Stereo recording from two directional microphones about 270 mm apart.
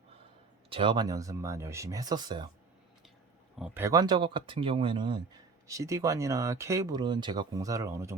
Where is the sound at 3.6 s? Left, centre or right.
Centre.